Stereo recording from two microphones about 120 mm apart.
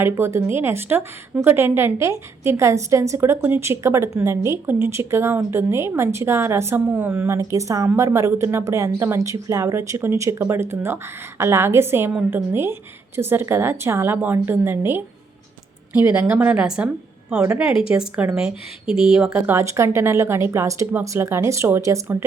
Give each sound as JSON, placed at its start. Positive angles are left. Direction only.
{"t": 0.0, "sound": "a woman's voice", "side_deg": -20}
{"t": 19.5, "sound": "a woman's voice", "side_deg": -25}